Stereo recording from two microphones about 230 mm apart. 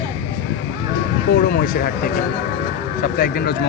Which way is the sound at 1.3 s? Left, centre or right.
Left.